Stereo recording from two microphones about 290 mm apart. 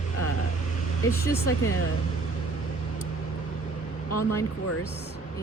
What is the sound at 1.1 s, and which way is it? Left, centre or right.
Speech, centre.